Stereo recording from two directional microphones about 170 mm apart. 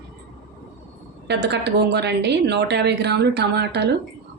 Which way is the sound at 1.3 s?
80° right.